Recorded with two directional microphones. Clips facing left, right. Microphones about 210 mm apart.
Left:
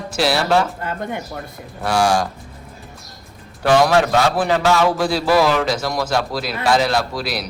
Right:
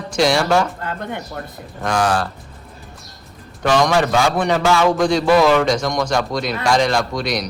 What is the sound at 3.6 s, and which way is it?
A man's voice, 5° left (ahead or behind).